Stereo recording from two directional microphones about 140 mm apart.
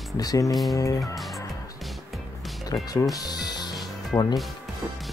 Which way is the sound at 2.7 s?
25° left (ahead or behind).